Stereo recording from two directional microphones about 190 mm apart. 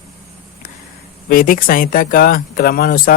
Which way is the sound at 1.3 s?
45° left (ahead or behind).